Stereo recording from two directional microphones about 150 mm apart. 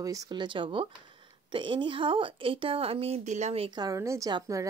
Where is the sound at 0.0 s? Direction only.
25° right (ahead or behind); by 3.8 s 40° right (ahead or behind).